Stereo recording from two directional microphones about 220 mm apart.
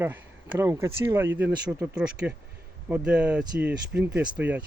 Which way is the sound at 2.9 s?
5° right (ahead or behind).